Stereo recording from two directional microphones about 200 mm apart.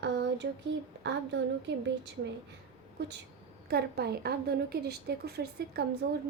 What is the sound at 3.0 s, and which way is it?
A woman's voice, 60° right (ahead or behind).